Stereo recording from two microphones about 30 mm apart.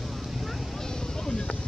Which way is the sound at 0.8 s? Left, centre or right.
Centre.